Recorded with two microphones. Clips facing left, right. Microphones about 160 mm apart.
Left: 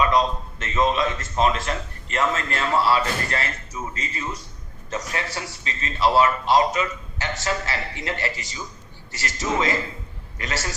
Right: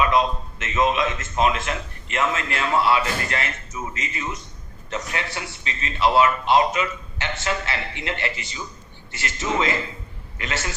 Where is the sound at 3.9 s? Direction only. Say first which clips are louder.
Right 1 dB; 30° left (ahead or behind).